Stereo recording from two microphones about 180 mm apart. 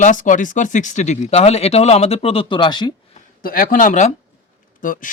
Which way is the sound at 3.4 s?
55° left (ahead or behind).